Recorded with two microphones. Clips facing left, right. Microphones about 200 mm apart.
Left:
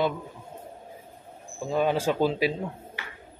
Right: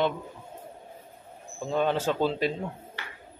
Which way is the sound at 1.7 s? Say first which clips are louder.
Left 1 dB; 10° left (ahead or behind).